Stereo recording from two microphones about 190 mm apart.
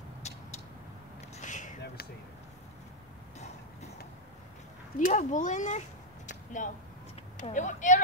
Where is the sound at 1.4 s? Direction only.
40° left (ahead or behind).